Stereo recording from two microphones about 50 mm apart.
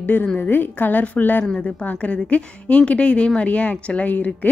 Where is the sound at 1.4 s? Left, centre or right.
Left.